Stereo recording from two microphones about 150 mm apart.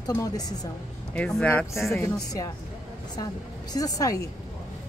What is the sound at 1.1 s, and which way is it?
Speech, 10° left (ahead or behind).